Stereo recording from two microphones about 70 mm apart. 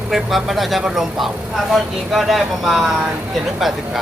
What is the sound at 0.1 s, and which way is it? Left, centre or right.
Speech, centre.